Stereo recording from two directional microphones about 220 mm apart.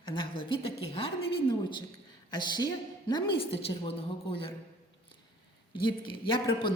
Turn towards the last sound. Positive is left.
turn(degrees=20)  # may be behind; listen again after turning